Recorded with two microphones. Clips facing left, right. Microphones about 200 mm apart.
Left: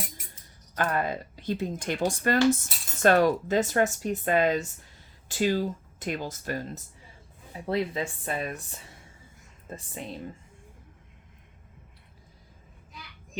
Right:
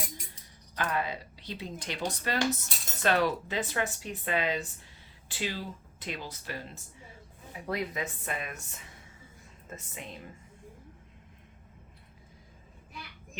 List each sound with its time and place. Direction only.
0.8 s speech: 50° left (ahead or behind)
7.7 s speech: 30° left (ahead or behind)